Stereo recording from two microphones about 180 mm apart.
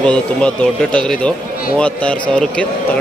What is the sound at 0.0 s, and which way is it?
A man's voice, 5° left (ahead or behind).